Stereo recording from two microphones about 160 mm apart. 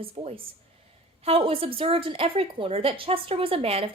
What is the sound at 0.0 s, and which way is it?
A woman's voice, 35° right (ahead or behind).